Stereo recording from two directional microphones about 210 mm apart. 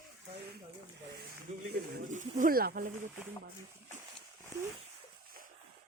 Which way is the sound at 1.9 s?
35° right (ahead or behind).